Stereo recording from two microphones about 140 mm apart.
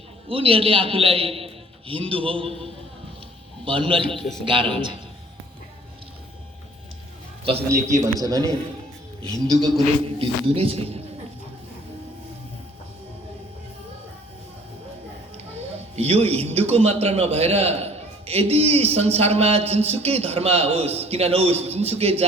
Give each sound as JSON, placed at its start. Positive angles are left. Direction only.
{"t": 0.3, "sound": "a man's voice", "side_deg": -40}
{"t": 3.6, "sound": "a man's voice", "side_deg": -40}
{"t": 4.2, "sound": "a man's voice", "side_deg": 5}
{"t": 4.4, "sound": "a man's voice", "side_deg": -40}
{"t": 7.9, "sound": "a man's voice", "side_deg": -20}
{"t": 9.6, "sound": "a man's voice", "side_deg": -30}
{"t": 10.4, "sound": "a man's voice", "side_deg": -45}
{"t": 16.0, "sound": "a man's voice", "side_deg": -45}